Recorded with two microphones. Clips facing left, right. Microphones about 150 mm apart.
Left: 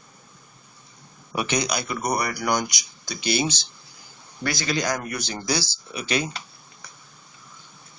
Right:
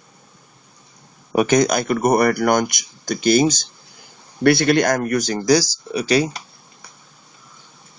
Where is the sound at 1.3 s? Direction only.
45° right (ahead or behind).